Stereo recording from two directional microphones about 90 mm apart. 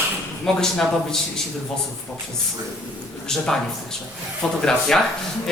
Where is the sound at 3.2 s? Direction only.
5° left (ahead or behind).